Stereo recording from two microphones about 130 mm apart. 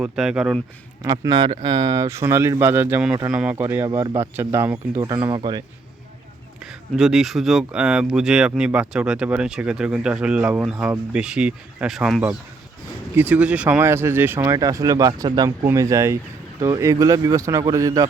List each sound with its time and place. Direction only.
0.0 s speech: 5° right (ahead or behind)
1.0 s speech: 30° right (ahead or behind)
5.0 s speech: 35° right (ahead or behind)
6.6 s speech: 5° right (ahead or behind); by 18.1 s 25° right (ahead or behind)